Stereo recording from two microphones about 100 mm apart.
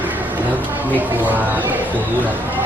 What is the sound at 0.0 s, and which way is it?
Speech, 15° right (ahead or behind).